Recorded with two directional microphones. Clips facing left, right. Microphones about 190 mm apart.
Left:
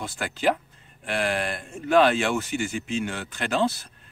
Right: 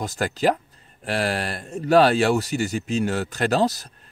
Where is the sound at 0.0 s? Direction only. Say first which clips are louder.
Right 3 dB; 40° right (ahead or behind).